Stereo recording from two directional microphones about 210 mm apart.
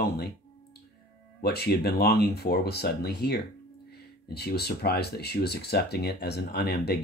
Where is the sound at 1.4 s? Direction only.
50° left (ahead or behind).